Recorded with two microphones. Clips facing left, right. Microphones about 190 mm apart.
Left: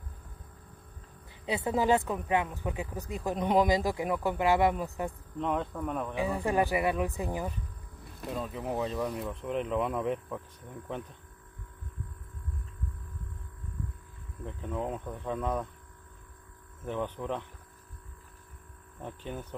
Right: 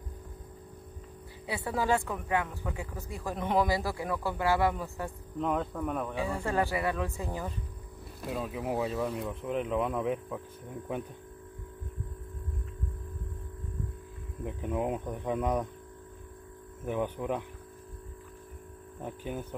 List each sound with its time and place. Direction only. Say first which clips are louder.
1.4 s speech: left 3 dB; 20° left (ahead or behind)
5.4 s speech: right 1 dB; centre (ahead or behind)
6.1 s speech: left 4 dB; 15° left (ahead or behind)
8.3 s speech: right 1 dB; 5° right (ahead or behind)
14.4 s speech: right 3 dB; 15° right (ahead or behind)
16.8 s speech: right 2 dB; 10° right (ahead or behind)
19.0 s speech: right 2 dB; 10° right (ahead or behind)